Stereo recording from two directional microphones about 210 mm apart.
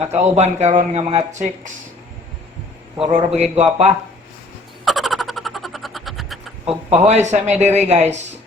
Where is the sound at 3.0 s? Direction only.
30° right (ahead or behind).